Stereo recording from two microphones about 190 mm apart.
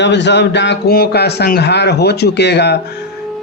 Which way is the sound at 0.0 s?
65° left (ahead or behind).